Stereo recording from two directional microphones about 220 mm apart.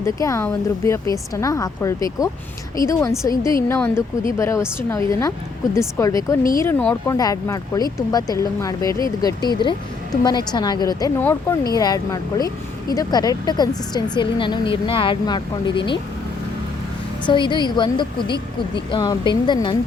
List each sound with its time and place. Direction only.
0.0 s a woman's voice: 15° left (ahead or behind)
17.2 s a woman's voice: 20° left (ahead or behind)